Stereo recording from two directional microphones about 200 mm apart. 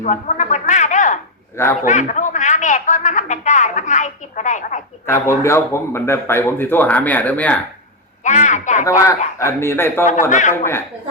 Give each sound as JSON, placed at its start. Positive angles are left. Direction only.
{"t": 0.0, "sound": "a sound", "side_deg": 35}
{"t": 1.8, "sound": "a man's voice", "side_deg": 40}
{"t": 5.0, "sound": "speech", "side_deg": 15}
{"t": 8.2, "sound": "a woman's voice", "side_deg": 35}
{"t": 8.8, "sound": "speech", "side_deg": 15}
{"t": 10.2, "sound": "a woman's voice", "side_deg": 40}